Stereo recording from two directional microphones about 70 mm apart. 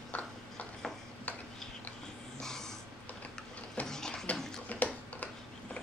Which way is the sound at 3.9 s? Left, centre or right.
Centre.